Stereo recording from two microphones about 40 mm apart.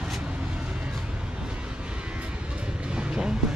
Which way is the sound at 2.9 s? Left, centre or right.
Right.